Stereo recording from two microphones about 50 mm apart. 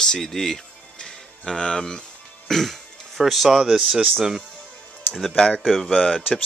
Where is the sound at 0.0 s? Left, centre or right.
Centre.